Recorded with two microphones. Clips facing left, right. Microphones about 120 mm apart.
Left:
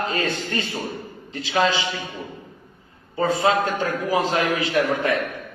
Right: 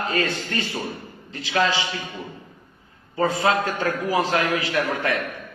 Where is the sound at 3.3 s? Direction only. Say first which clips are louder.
Left 2 dB; 25° left (ahead or behind).